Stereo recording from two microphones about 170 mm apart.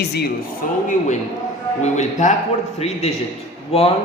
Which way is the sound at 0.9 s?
45° left (ahead or behind).